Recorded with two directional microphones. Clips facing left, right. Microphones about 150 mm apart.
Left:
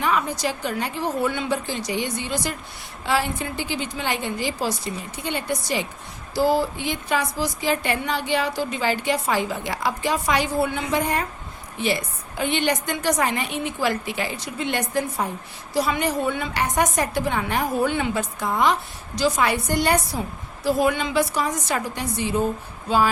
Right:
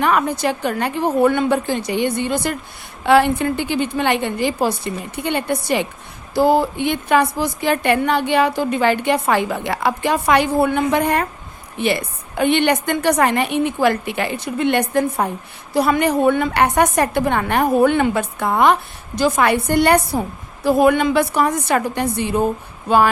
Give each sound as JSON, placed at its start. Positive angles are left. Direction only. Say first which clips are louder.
{"t": 0.0, "sound": "a woman's voice", "louder": "right 6 dB", "side_deg": -60}